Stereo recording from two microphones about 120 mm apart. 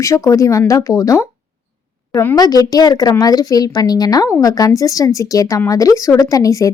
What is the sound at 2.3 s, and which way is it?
A woman's voice, 35° left (ahead or behind).